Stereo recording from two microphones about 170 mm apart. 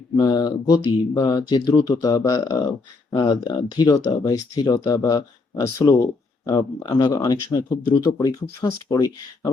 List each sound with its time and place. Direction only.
0.2 s speech: 25° left (ahead or behind)